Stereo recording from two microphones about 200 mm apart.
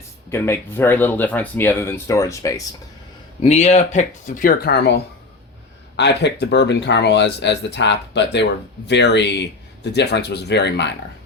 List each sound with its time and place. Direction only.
0.3 s speech: 15° left (ahead or behind)
3.4 s speech: 35° left (ahead or behind); by 10.9 s 60° left (ahead or behind)